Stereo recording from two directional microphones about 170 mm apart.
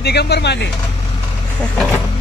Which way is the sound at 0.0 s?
75° left (ahead or behind).